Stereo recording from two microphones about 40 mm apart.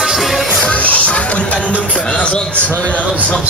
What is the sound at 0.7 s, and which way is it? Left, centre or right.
Music, left.